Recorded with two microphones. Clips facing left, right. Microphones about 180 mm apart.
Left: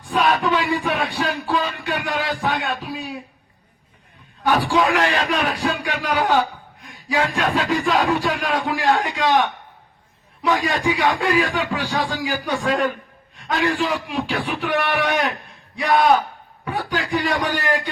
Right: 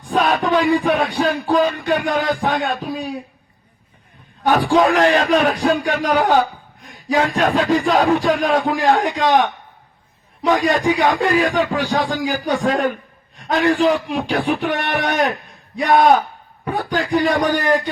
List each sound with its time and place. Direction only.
0.1 s music: 40° right (ahead or behind)
4.4 s music: 40° right (ahead or behind)
6.8 s speech: 45° right (ahead or behind)
10.4 s speech: 45° right (ahead or behind)
12.2 s music: 40° right (ahead or behind)
15.8 s speech: 45° right (ahead or behind)
16.6 s music: 40° right (ahead or behind)